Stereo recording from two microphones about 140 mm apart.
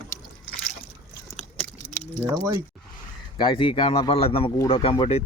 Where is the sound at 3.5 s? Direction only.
40° left (ahead or behind).